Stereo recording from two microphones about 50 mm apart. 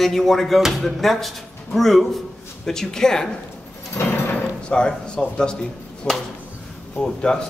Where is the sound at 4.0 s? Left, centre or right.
Left.